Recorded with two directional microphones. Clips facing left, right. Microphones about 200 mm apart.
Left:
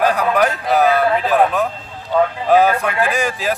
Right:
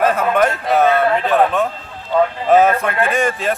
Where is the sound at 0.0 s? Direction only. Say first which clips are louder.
Right 1 dB; centre (ahead or behind).